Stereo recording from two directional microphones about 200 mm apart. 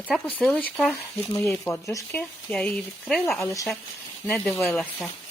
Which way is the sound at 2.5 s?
5° left (ahead or behind).